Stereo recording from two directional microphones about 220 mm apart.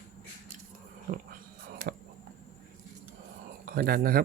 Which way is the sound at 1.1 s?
40° right (ahead or behind).